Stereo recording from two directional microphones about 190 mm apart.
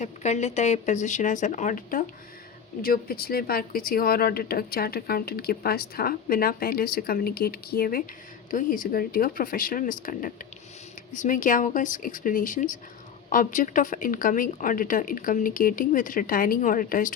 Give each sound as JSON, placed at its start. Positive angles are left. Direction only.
{"t": 0.0, "sound": "speech", "side_deg": 35}